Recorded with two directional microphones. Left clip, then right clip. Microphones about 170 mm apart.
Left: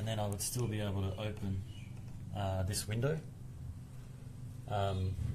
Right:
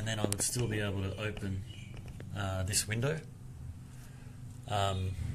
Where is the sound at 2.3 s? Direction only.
Centre (ahead or behind).